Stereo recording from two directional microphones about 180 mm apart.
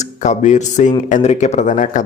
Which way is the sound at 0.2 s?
40° left (ahead or behind).